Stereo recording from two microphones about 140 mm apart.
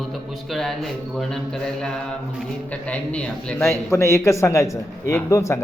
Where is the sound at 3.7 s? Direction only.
20° left (ahead or behind).